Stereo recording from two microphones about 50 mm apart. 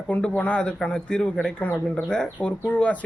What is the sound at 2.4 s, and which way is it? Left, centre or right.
Speech, left.